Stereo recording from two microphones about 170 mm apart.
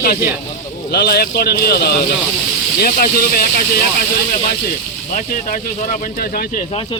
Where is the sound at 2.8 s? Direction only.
60° left (ahead or behind).